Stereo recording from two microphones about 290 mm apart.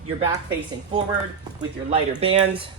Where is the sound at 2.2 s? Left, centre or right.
Centre.